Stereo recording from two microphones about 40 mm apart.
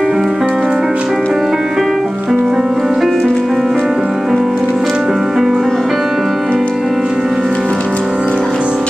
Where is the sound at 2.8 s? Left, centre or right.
Centre.